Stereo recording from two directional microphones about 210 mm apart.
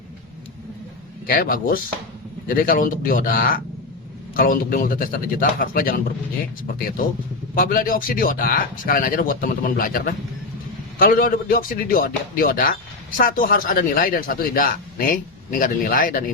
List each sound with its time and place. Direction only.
1.3 s speech: 40° left (ahead or behind)
7.5 s speech: 40° left (ahead or behind)